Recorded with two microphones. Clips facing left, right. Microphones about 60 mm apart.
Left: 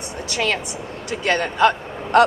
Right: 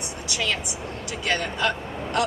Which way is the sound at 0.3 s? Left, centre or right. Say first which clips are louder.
Left 5 dB; left.